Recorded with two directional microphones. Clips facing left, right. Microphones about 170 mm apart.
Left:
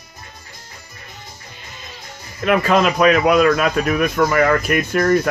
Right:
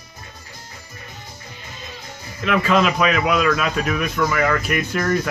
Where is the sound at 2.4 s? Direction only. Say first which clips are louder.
Left 2 dB; 45° left (ahead or behind).